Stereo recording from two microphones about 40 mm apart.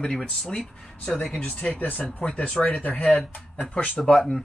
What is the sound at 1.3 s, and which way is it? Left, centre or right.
Speech, left.